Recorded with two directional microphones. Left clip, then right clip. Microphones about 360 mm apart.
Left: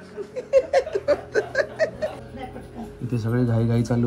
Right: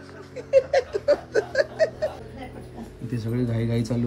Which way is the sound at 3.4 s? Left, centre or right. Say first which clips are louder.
Left 3 dB; left.